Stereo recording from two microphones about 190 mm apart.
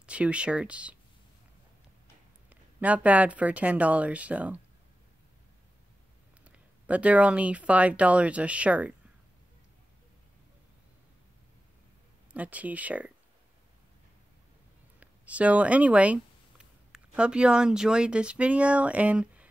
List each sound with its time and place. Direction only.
0.0 s speech: 5° right (ahead or behind)
2.5 s speech: 5° right (ahead or behind)
6.4 s speech: 5° right (ahead or behind)
12.3 s speech: 5° right (ahead or behind)
15.0 s speech: 5° right (ahead or behind)